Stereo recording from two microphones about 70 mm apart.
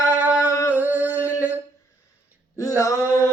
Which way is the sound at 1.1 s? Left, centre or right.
Left.